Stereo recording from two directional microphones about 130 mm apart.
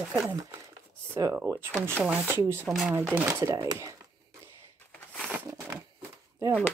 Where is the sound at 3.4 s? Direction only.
30° right (ahead or behind).